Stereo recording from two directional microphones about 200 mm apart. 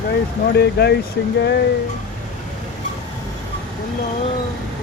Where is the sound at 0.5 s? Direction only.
55° left (ahead or behind).